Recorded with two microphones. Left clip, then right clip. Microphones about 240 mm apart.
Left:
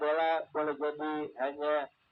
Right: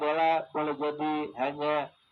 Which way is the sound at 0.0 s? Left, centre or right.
Right.